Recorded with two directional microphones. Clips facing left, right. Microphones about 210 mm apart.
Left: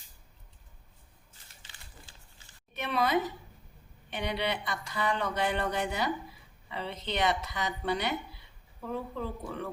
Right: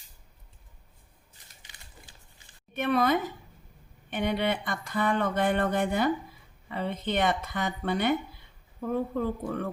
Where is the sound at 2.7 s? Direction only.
50° right (ahead or behind).